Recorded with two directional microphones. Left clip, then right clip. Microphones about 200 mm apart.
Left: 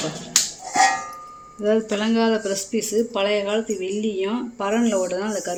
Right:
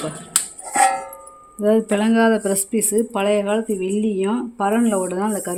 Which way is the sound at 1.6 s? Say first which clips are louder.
Right 3 dB; 55° right (ahead or behind).